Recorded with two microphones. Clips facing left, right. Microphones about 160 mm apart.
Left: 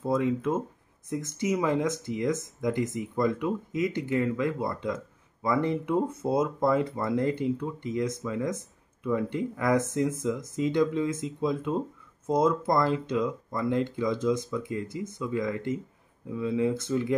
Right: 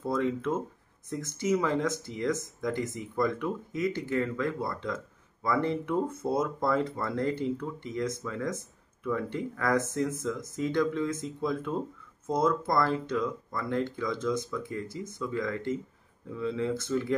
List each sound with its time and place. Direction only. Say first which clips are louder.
0.0 s speech: left 3 dB; 15° left (ahead or behind)